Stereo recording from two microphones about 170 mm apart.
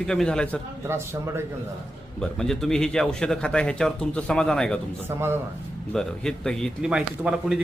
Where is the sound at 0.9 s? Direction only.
15° right (ahead or behind).